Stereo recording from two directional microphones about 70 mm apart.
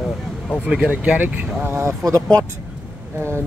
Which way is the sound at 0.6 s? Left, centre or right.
Centre.